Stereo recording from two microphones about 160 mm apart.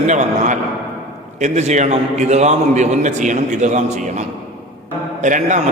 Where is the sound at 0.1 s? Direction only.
50° right (ahead or behind).